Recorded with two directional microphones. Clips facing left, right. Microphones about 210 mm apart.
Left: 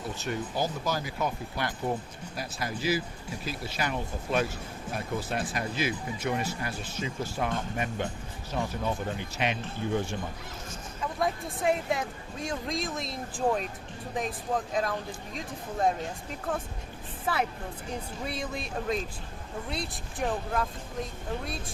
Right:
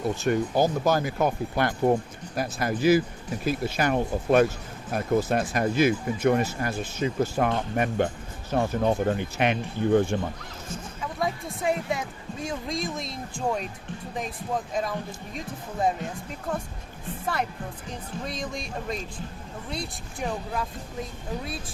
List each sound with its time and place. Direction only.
0.3 s speech: 50° right (ahead or behind)
11.0 s speech: centre (ahead or behind)
18.3 s speech: 5° left (ahead or behind)